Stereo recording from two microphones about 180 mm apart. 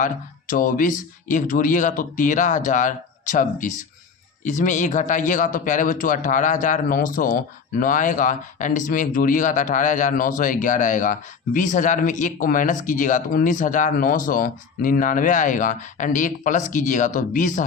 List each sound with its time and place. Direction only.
0.0 s speech: 50° left (ahead or behind)